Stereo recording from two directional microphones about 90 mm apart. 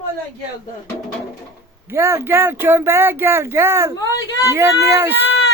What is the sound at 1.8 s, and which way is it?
Speech, 30° right (ahead or behind).